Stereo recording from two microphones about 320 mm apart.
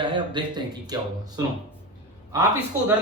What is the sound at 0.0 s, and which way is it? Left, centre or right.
Speech, centre.